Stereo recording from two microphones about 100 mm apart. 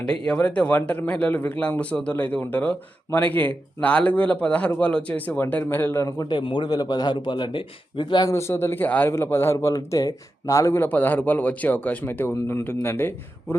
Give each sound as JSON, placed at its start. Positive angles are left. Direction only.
{"t": 0.0, "sound": "a man's voice", "side_deg": 10}
{"t": 6.2, "sound": "a man's voice", "side_deg": 55}
{"t": 8.3, "sound": "speech", "side_deg": 30}